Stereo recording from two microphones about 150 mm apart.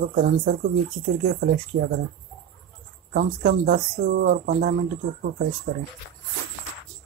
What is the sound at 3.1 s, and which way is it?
Speech, 65° right (ahead or behind).